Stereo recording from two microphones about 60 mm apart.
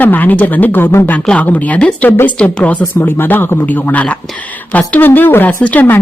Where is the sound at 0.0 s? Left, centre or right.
Left.